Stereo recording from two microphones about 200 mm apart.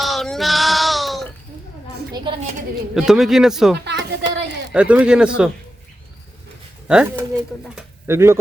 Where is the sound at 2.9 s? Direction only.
Centre (ahead or behind).